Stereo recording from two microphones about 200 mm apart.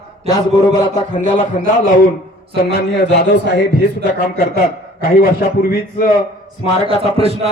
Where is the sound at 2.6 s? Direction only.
55° left (ahead or behind).